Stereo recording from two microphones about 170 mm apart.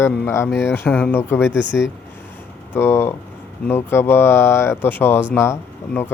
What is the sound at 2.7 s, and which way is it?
Speech, 15° left (ahead or behind).